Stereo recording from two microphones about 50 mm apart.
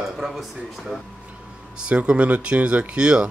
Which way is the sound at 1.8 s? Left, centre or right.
Right.